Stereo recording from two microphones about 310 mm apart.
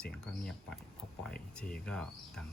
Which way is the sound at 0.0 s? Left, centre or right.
Centre.